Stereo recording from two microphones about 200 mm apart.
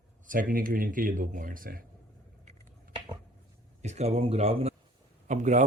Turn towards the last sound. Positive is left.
turn(degrees=-35)  # may be behind; listen again after turning